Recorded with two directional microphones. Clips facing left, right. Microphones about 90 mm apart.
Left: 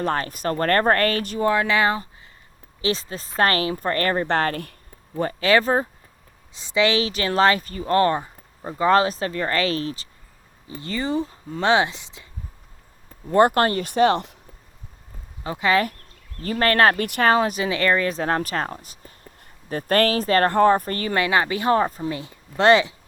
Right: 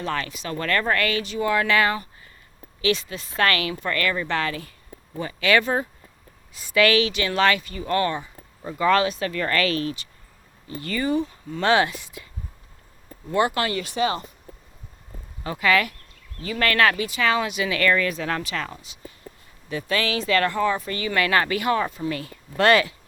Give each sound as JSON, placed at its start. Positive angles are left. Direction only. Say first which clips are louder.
{"t": 0.0, "sound": "speech", "louder": "left 5 dB", "side_deg": 40}
{"t": 1.5, "sound": "speech", "louder": "left 1 dB", "side_deg": 20}
{"t": 5.4, "sound": "speech", "louder": "left 2 dB", "side_deg": 35}
{"t": 11.6, "sound": "speech", "louder": "left 1 dB", "side_deg": 20}
{"t": 13.3, "sound": "speech", "louder": "left 5 dB", "side_deg": 45}
{"t": 15.4, "sound": "speech", "louder": "left 1 dB", "side_deg": 25}
{"t": 17.0, "sound": "speech", "louder": "left 4 dB", "side_deg": 55}
{"t": 17.3, "sound": "speech", "louder": "left 3 dB", "side_deg": 40}
{"t": 21.2, "sound": "speech", "louder": "even", "side_deg": 20}
{"t": 22.1, "sound": "speech", "louder": "even", "side_deg": 25}